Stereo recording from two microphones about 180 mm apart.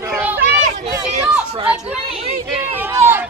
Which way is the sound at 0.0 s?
10° right (ahead or behind).